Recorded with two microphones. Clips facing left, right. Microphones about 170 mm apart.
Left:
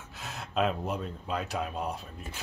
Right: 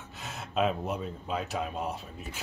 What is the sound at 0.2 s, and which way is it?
A man's voice, centre (ahead or behind).